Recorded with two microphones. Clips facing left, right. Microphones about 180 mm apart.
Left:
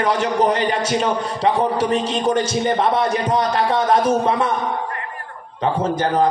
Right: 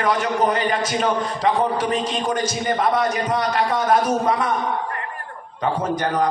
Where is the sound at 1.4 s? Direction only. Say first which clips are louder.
Left 3 dB; 30° left (ahead or behind).